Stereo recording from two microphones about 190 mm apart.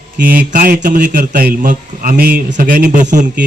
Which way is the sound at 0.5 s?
45° right (ahead or behind).